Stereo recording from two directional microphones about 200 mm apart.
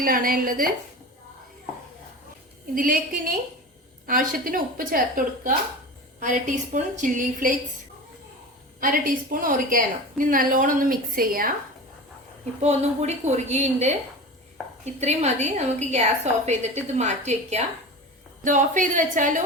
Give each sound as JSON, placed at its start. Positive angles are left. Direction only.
{"t": 0.0, "sound": "a woman's voice", "side_deg": -45}
{"t": 2.7, "sound": "a woman's voice", "side_deg": -45}
{"t": 8.8, "sound": "a woman's voice", "side_deg": -45}
{"t": 12.6, "sound": "a woman's voice", "side_deg": -35}
{"t": 15.0, "sound": "a woman's voice", "side_deg": -35}